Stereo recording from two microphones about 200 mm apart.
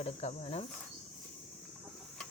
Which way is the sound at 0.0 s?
35° left (ahead or behind).